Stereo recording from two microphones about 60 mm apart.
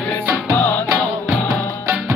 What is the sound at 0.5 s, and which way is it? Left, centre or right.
Music, left.